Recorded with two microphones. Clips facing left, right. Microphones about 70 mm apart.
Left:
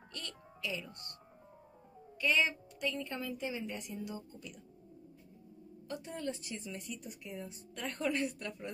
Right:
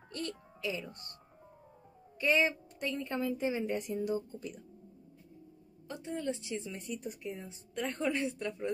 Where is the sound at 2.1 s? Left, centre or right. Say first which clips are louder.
Right 3 dB; right.